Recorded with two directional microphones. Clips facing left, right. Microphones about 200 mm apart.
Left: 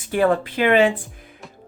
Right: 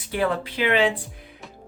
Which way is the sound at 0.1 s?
50° left (ahead or behind).